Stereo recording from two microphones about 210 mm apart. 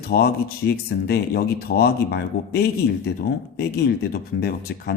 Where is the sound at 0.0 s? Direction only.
45° left (ahead or behind).